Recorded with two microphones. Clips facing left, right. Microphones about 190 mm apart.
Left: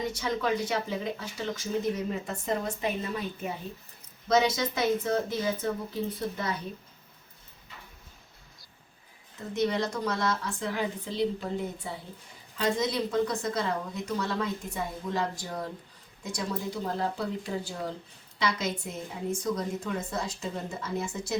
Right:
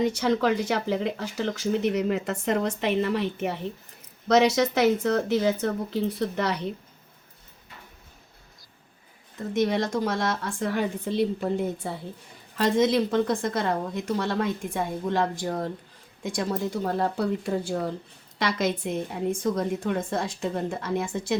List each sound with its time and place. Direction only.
0.2 s speech: 80° right
9.6 s a woman's voice: 50° right (ahead or behind)
18.8 s speech: 70° right (ahead or behind)
19.3 s a woman's voice: 55° right (ahead or behind)